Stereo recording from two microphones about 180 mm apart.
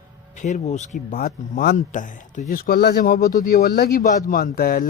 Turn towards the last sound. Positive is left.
turn(degrees=55)  # may be behind; listen again after turning